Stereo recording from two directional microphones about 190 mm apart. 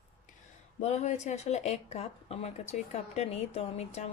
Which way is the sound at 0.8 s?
35° left (ahead or behind).